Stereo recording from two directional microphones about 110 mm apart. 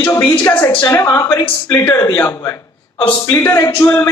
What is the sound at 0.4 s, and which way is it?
Speech, 25° left (ahead or behind).